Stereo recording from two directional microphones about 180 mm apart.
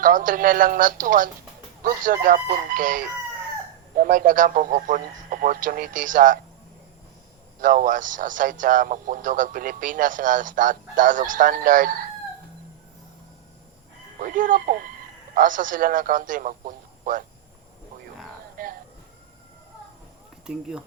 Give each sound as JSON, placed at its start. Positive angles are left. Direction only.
{"t": 0.0, "sound": "a man's voice", "side_deg": -45}
{"t": 7.6, "sound": "a man's voice", "side_deg": -50}
{"t": 14.2, "sound": "a man's voice", "side_deg": -45}
{"t": 18.5, "sound": "speech", "side_deg": -50}
{"t": 20.5, "sound": "speech", "side_deg": -5}